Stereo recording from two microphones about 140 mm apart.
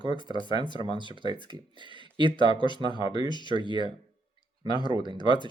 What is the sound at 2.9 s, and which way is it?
Speech, 30° left (ahead or behind).